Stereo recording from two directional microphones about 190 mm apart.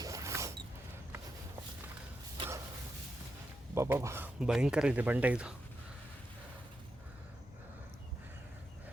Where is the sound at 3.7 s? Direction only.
15° right (ahead or behind).